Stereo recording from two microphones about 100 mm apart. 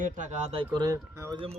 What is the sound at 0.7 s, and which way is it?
Speech, 45° right (ahead or behind).